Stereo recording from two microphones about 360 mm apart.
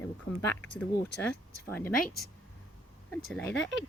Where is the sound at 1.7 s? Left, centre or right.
Centre.